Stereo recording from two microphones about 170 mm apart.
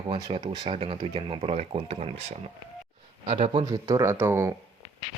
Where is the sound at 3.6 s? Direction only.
20° right (ahead or behind).